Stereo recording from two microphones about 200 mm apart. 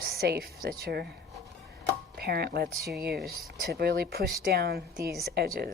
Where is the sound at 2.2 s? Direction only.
50° right (ahead or behind).